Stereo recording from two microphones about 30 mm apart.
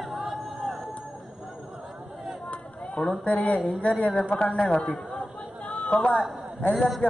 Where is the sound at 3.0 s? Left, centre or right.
Left.